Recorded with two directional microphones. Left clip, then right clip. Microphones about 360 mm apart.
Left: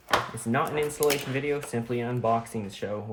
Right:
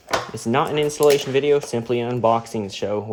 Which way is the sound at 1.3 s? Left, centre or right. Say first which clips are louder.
Right 11 dB; centre.